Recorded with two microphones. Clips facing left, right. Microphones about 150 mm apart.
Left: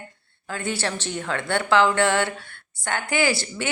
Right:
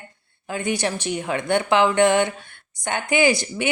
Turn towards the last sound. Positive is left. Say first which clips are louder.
# right 4 dB
turn(degrees=-15)  # may be behind; listen again after turning